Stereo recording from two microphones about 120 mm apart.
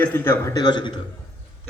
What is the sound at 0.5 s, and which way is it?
Speech, 35° left (ahead or behind).